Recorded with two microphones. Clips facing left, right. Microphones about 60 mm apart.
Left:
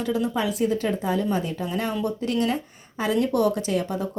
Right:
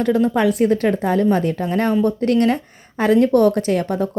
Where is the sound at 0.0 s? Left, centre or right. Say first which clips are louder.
Right 8 dB; right.